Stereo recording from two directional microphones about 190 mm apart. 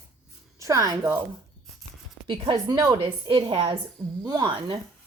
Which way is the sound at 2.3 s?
25° right (ahead or behind).